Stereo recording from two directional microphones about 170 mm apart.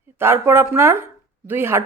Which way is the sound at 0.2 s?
15° right (ahead or behind).